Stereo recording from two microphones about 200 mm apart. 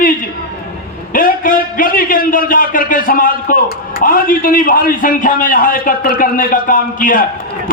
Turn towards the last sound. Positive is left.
turn(degrees=45)  # may be behind; listen again after turning